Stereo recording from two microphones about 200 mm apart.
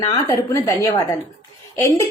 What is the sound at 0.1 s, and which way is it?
A woman's voice, 15° left (ahead or behind).